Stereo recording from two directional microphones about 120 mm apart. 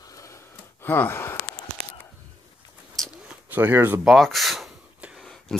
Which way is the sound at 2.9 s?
5° right (ahead or behind).